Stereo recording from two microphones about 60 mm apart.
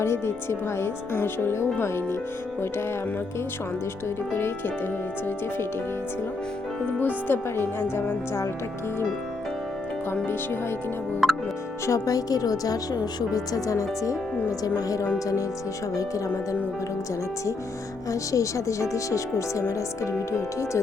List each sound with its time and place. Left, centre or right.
0.0 s speech: left
4.4 s speech: left
7.0 s speech: left
10.2 s speech: left
11.2 s music: centre
11.9 s speech: left
18.1 s speech: left